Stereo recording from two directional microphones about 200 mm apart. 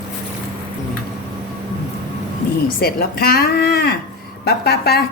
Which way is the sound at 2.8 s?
50° left (ahead or behind).